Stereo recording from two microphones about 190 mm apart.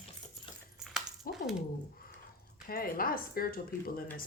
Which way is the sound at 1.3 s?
50° left (ahead or behind).